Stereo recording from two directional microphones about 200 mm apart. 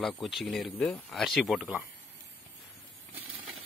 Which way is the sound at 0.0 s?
Centre (ahead or behind).